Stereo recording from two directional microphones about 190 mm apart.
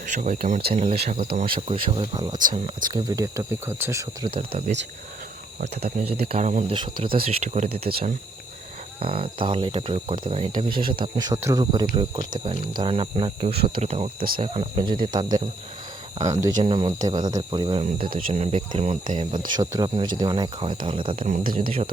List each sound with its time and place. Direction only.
0.1 s speech: 40° right (ahead or behind); by 4.3 s 15° right (ahead or behind)
5.5 s speech: 55° right (ahead or behind)
6.2 s speech: 35° right (ahead or behind)
6.7 s speech: 25° right (ahead or behind)
7.9 s speech: 50° right (ahead or behind)
9.0 s speech: 30° right (ahead or behind)
18.1 s speech: 40° right (ahead or behind)
21.3 s speech: 50° right (ahead or behind)